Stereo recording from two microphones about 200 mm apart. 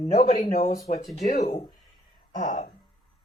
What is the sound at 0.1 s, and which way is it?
Speech, 30° left (ahead or behind).